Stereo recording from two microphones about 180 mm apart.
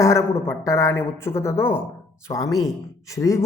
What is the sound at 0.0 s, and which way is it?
Speech, 15° left (ahead or behind).